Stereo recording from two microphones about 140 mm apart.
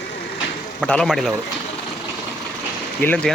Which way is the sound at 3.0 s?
10° left (ahead or behind).